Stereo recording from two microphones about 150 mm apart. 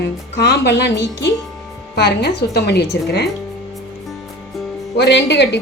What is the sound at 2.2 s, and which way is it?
A woman's voice, 90° left.